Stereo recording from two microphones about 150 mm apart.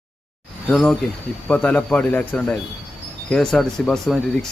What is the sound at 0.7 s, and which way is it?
A man's voice, 5° left (ahead or behind).